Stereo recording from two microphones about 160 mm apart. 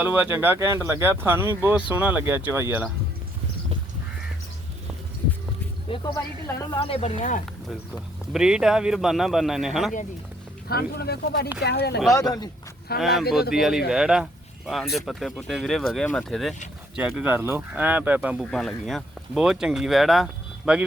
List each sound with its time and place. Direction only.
0.0 s speech: 10° right (ahead or behind)
5.9 s speech: 35° left (ahead or behind); by 7.4 s 50° left (ahead or behind)
8.3 s speech: 5° right (ahead or behind)
10.7 s speech: 75° left (ahead or behind)
12.1 s speech: 25° left (ahead or behind)
13.0 s speech: centre (ahead or behind)